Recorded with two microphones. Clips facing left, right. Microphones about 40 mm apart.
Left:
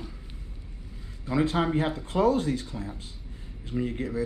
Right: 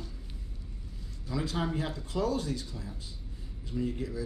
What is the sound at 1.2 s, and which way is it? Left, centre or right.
Speech, left.